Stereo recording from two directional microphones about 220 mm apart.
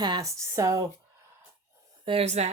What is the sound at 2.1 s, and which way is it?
Speech, 30° right (ahead or behind).